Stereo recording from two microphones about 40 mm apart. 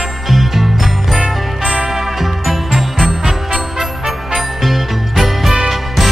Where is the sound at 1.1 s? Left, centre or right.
Centre.